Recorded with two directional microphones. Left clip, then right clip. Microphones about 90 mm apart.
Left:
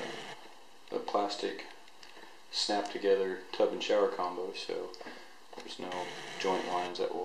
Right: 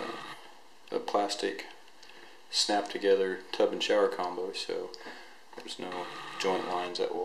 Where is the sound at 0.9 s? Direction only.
30° right (ahead or behind).